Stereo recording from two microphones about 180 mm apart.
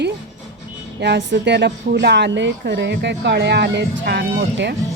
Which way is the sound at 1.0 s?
70° right (ahead or behind).